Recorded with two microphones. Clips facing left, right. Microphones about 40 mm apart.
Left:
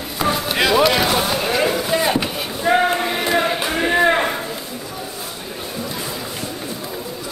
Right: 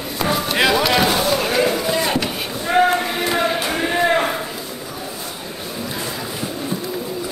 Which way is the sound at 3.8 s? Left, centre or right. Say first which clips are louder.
Left 2 dB; centre.